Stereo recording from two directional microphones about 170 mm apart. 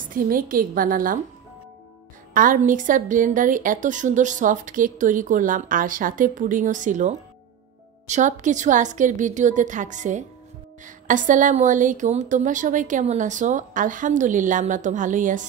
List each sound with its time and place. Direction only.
0.1 s a woman's voice: 55° right (ahead or behind)
2.3 s a woman's voice: 50° right (ahead or behind)